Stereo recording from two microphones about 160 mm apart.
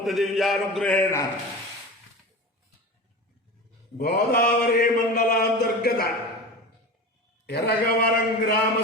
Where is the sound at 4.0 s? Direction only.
75° left (ahead or behind).